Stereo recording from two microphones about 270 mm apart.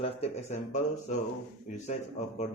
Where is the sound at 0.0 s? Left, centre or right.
Left.